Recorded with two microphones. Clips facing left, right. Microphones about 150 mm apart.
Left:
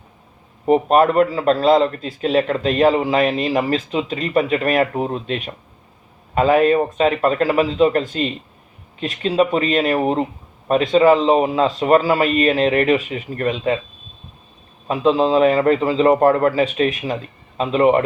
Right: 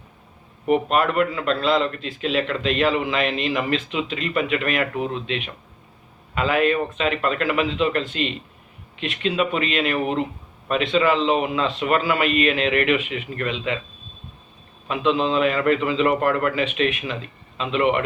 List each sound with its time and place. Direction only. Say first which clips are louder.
0.6 s a man's voice: left 6 dB; 35° left (ahead or behind)
14.8 s a man's voice: left 5 dB; 35° left (ahead or behind)